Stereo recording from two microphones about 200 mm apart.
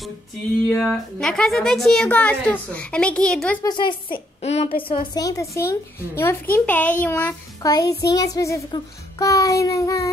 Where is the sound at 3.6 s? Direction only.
20° left (ahead or behind).